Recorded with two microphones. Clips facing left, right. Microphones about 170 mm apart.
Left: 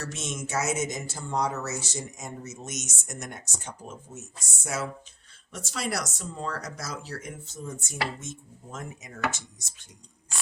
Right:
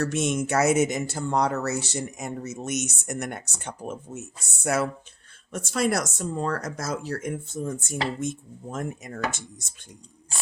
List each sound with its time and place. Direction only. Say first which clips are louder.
0.0 s speech: right 10 dB; 60° right (ahead or behind)
5.5 s speech: right 8 dB; 50° right (ahead or behind)